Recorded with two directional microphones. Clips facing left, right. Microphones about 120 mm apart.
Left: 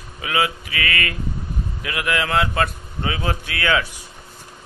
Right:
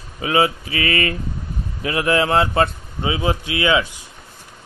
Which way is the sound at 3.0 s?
15° right (ahead or behind).